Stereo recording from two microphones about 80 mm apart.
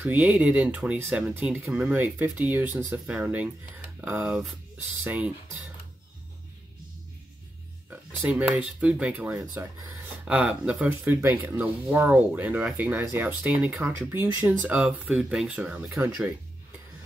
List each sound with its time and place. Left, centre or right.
0.0 s speech: centre
7.9 s a sound: centre
8.5 s speech: centre
9.4 s speech: right
10.2 s speech: centre
11.1 s speech: right